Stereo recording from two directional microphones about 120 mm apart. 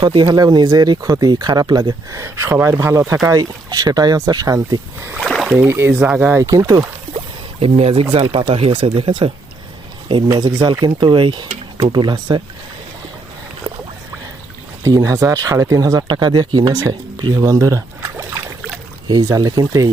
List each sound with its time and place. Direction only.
0.0 s speech: 40° right (ahead or behind); by 3.2 s 25° right (ahead or behind)
3.2 s speech: 35° right (ahead or behind)
5.2 s rowboat: centre (ahead or behind)
5.5 s speech: 20° right (ahead or behind)
6.4 s speech: 30° right (ahead or behind)
7.6 s speech: 55° right (ahead or behind)
10.3 s speech: 35° right (ahead or behind)
13.7 s boat: 50° right (ahead or behind)
14.8 s speech: 25° right (ahead or behind)
17.4 s rowboat: 25° right (ahead or behind)
19.0 s speech: 35° right (ahead or behind)